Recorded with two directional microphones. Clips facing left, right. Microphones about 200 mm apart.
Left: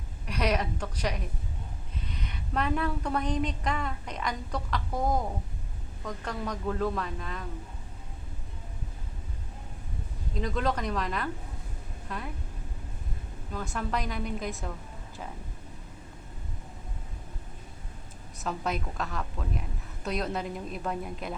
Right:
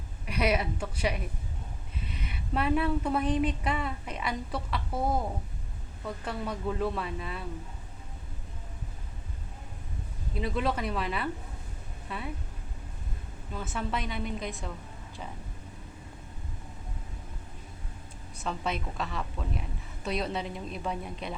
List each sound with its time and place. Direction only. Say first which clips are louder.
0.3 s speech: right 1 dB; 10° right (ahead or behind)
10.3 s a woman's voice: even; 5° right (ahead or behind)
13.5 s a woman's voice: left 1 dB; 5° right (ahead or behind)
18.3 s a woman's voice: left 1 dB; centre (ahead or behind)